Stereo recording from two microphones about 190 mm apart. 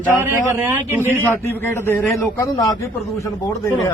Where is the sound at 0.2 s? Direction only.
15° right (ahead or behind).